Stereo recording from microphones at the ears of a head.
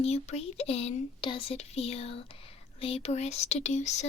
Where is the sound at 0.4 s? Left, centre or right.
Left.